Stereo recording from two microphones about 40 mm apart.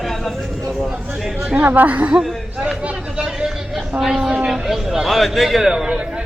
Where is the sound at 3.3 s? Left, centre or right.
Centre.